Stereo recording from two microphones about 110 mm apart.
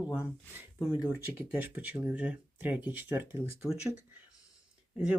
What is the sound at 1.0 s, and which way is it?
Speech, 20° right (ahead or behind).